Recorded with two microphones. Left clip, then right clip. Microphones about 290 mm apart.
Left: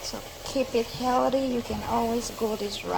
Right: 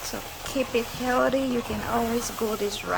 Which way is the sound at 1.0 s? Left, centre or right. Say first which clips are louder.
Right 1 dB; centre.